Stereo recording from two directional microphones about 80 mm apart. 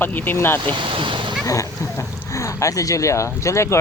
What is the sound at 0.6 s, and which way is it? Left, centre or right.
Speech, right.